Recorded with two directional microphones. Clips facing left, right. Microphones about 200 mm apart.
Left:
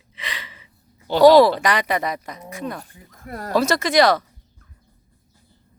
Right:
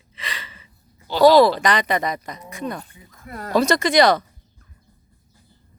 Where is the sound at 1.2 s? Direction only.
15° left (ahead or behind).